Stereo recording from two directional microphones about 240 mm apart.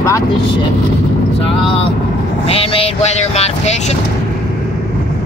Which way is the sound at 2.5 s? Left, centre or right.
Left.